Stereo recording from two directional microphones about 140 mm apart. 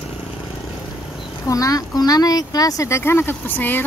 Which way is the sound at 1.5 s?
25° left (ahead or behind).